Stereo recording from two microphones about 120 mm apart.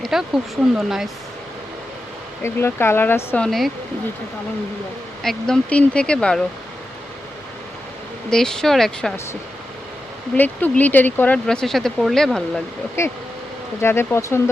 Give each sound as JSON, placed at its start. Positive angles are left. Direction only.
{"t": 0.0, "sound": "speech", "side_deg": 0}
{"t": 2.4, "sound": "speech", "side_deg": 20}
{"t": 3.4, "sound": "speech", "side_deg": 0}
{"t": 5.2, "sound": "speech", "side_deg": 5}
{"t": 8.3, "sound": "speech", "side_deg": 5}
{"t": 10.3, "sound": "speech", "side_deg": 15}
{"t": 13.0, "sound": "speech", "side_deg": 25}